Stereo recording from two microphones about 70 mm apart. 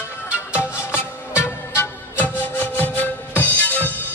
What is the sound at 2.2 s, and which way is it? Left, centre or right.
Music, left.